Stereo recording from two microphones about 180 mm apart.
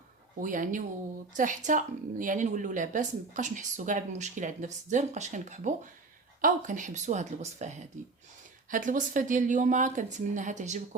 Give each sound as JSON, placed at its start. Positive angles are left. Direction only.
{"t": 0.3, "sound": "a woman's voice", "side_deg": -45}